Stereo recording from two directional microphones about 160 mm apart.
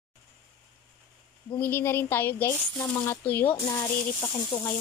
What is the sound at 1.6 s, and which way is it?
Speech, 15° left (ahead or behind).